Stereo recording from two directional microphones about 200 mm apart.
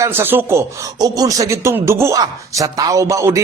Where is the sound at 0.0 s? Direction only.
10° right (ahead or behind).